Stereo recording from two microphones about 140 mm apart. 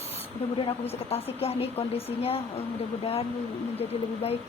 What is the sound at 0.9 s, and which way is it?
Speech, 45° left (ahead or behind).